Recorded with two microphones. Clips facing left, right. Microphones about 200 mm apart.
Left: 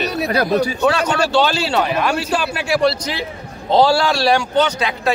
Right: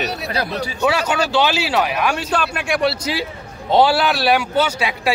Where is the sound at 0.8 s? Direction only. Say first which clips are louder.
Left 2 dB; 5° right (ahead or behind).